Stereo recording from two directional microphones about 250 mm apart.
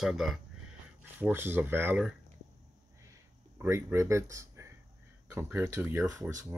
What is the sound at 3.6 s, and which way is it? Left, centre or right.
Speech, centre.